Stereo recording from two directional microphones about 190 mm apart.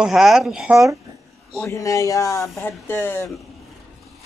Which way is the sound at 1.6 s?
15° left (ahead or behind).